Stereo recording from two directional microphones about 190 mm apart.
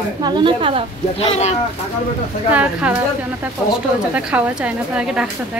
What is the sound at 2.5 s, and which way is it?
Speech, 5° right (ahead or behind).